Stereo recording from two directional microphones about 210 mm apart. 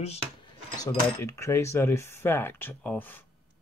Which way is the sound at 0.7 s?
15° left (ahead or behind).